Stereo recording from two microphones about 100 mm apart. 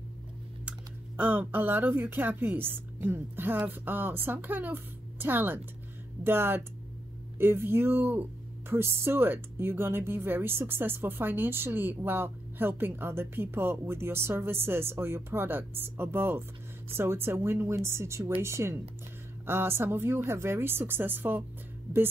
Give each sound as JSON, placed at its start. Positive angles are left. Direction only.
{"t": 0.7, "sound": "speech", "side_deg": -15}